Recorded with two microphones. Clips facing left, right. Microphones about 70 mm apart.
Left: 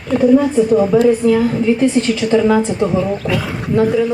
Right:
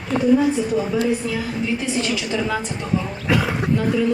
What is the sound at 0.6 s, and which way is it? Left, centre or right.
A woman's voice, left.